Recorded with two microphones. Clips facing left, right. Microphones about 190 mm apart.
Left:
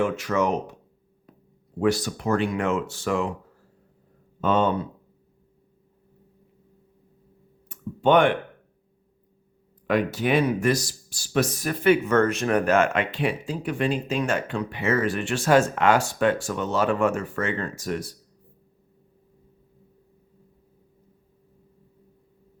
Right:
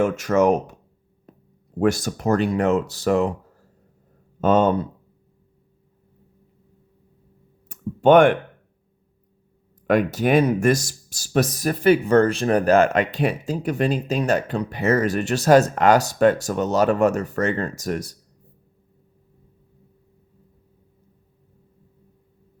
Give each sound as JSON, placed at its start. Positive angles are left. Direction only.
{"t": 0.0, "sound": "speech", "side_deg": -45}
{"t": 1.8, "sound": "speech", "side_deg": -50}
{"t": 4.4, "sound": "speech", "side_deg": -45}
{"t": 7.7, "sound": "a sound", "side_deg": -45}
{"t": 9.8, "sound": "speech", "side_deg": -45}